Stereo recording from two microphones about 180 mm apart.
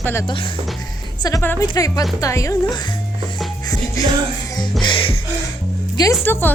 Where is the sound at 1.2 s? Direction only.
15° left (ahead or behind).